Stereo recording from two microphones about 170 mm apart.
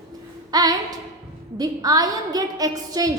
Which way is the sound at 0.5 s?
20° right (ahead or behind).